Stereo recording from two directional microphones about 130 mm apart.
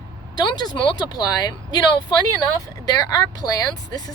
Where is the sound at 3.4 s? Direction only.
30° left (ahead or behind).